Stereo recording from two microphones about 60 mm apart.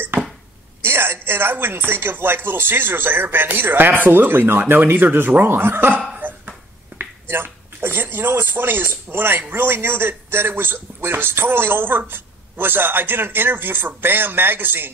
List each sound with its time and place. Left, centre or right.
0.8 s a man's voice: right
6.1 s a sound: right
7.0 s a man's voice: right